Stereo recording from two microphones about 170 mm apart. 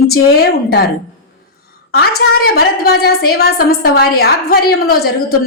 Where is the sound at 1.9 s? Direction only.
65° left (ahead or behind).